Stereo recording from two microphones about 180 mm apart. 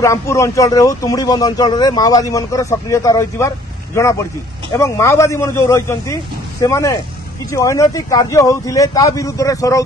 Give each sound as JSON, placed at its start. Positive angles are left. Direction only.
{"t": 0.0, "sound": "speech", "side_deg": 15}